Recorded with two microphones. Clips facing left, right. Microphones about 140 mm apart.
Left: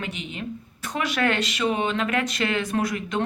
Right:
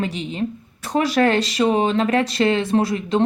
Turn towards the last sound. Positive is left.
turn(degrees=-30)  # may be behind; listen again after turning